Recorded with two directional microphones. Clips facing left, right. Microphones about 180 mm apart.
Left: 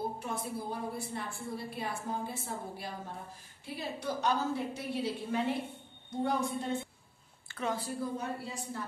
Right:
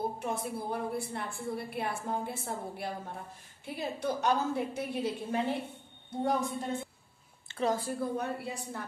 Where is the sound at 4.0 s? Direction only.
50° right (ahead or behind).